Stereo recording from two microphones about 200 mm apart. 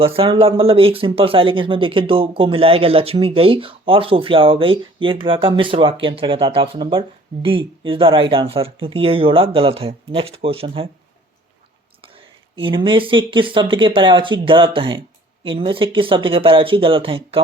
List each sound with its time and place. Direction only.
0.0 s speech: 30° right (ahead or behind)
12.5 s speech: 25° right (ahead or behind)